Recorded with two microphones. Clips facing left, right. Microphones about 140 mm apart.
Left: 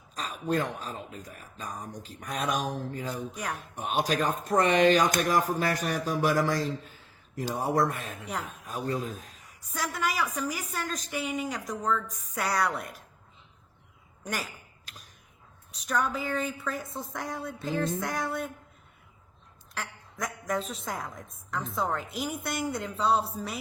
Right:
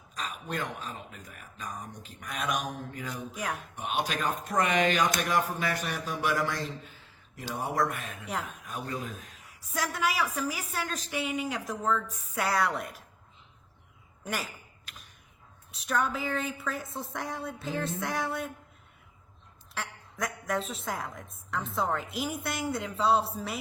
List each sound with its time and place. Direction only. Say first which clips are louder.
0.1 s speech: left 6 dB; 35° left (ahead or behind)
3.3 s a woman's voice: right 1 dB; centre (ahead or behind)
3.8 s speech: left 5 dB; 40° left (ahead or behind)
9.3 s a woman's voice: right 3 dB; 5° right (ahead or behind)
14.3 s a woman's voice: even; centre (ahead or behind)
15.7 s a woman's voice: even; centre (ahead or behind)
19.7 s a woman's voice: even; centre (ahead or behind)